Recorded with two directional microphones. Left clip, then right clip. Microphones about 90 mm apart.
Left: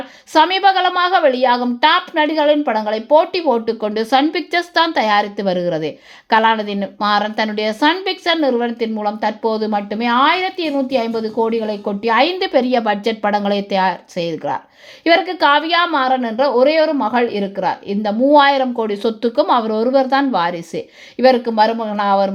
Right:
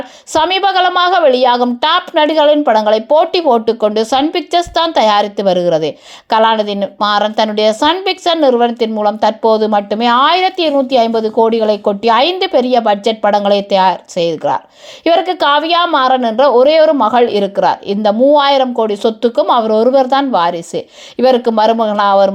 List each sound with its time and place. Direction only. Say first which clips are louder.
0.3 s a woman's voice: right 1 dB; 25° right (ahead or behind); by 3.8 s 40° right (ahead or behind)
3.8 s a woman's voice: right 4 dB; 25° right (ahead or behind)
15.0 s a woman's voice: right 2 dB; 30° right (ahead or behind); by 20.8 s 10° right (ahead or behind)
21.2 s a woman's voice: right 2 dB; 30° right (ahead or behind)
21.4 s speech: right 5 dB; 50° right (ahead or behind)
21.9 s a woman's voice: right 4 dB; 30° right (ahead or behind)